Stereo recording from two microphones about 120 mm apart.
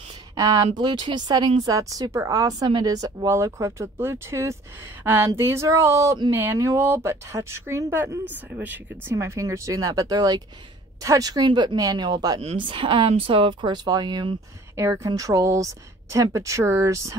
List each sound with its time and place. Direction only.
0.4 s speech: 35° right (ahead or behind); by 9.1 s 15° right (ahead or behind)
9.1 s speech: 25° right (ahead or behind)
12.4 s speech: 50° right (ahead or behind); by 17.2 s 25° right (ahead or behind)